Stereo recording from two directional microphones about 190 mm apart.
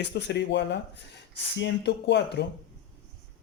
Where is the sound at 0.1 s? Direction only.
65° left (ahead or behind).